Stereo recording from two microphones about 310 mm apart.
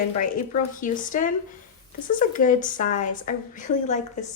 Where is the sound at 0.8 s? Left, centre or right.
Left.